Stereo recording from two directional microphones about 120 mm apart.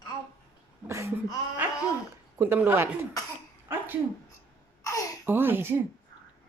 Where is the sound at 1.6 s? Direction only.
15° right (ahead or behind).